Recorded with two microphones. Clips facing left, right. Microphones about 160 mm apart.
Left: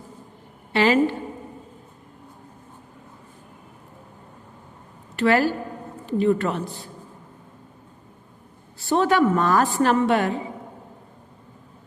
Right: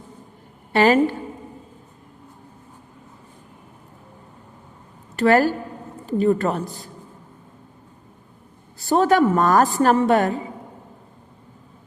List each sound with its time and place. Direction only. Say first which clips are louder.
0.7 s a sound: right 3 dB; 45° right (ahead or behind)
5.1 s a woman's voice: right 3 dB; 45° right (ahead or behind)
8.8 s a woman's voice: right 2 dB; 40° right (ahead or behind)